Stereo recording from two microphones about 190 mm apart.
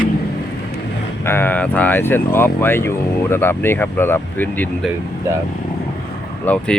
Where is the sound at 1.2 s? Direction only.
10° left (ahead or behind).